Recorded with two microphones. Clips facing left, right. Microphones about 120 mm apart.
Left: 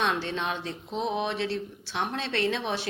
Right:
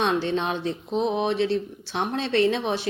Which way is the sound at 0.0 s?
25° right (ahead or behind).